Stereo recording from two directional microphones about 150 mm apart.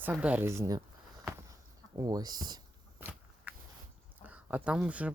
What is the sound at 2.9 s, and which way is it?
Walk, 10° right (ahead or behind).